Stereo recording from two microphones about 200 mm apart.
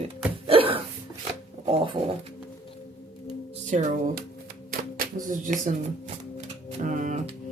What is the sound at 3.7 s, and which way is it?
Speech, 45° right (ahead or behind).